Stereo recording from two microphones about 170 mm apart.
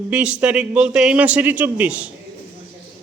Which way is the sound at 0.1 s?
5° right (ahead or behind).